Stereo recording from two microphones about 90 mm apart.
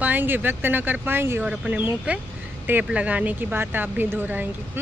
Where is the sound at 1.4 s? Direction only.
10° right (ahead or behind).